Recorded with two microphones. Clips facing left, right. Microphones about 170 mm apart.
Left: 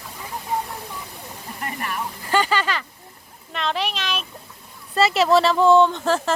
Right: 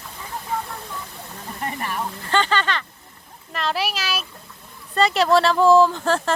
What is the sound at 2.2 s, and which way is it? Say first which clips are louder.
Speech: left 1 dB; 10° left (ahead or behind).